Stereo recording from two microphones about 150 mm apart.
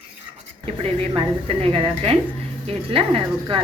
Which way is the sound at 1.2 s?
40° right (ahead or behind).